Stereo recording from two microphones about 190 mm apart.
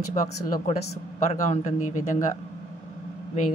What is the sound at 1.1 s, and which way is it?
A woman's voice, 40° left (ahead or behind).